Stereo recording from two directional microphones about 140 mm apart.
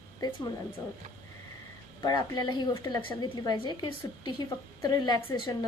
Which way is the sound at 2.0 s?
30° left (ahead or behind).